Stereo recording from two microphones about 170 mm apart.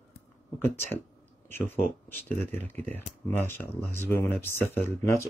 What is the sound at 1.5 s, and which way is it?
Speech, 10° left (ahead or behind).